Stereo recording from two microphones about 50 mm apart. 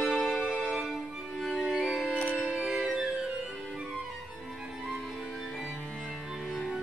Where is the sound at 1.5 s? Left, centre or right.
Centre.